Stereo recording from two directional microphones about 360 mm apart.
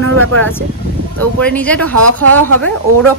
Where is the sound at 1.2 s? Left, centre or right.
Centre.